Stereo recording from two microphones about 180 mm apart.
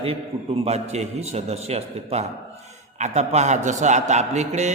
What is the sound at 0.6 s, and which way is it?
A man's voice, 35° right (ahead or behind).